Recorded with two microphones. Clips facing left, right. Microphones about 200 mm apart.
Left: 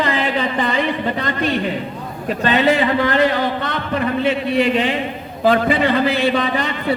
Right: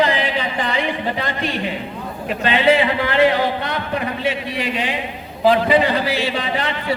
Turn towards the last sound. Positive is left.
turn(degrees=45)  # may be behind; listen again after turning